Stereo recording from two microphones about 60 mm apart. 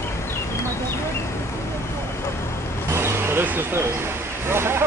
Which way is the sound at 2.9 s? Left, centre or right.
Right.